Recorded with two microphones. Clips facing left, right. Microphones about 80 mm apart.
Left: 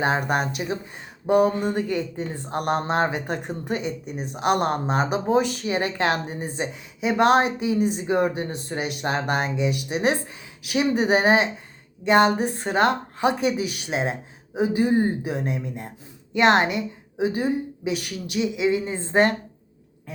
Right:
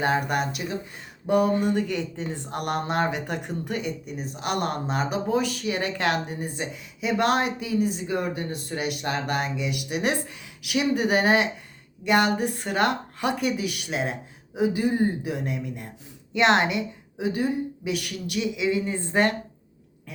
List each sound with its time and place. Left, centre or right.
0.0 s a woman's voice: left
0.3 s speech: left
1.7 s a woman's voice: left
4.0 s speech: left
5.6 s a woman's voice: left
6.4 s speech: left
10.7 s a woman's voice: left